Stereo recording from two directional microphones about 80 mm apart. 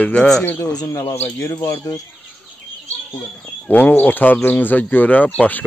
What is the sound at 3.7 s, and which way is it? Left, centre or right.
Speech, left.